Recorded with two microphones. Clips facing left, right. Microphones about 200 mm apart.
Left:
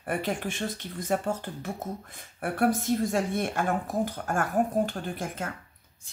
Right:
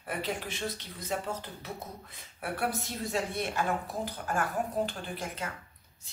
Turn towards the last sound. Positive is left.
turn(degrees=50)  # may be behind; listen again after turning